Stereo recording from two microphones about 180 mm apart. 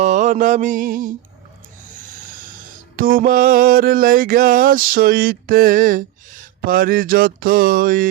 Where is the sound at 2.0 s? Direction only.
50° right (ahead or behind).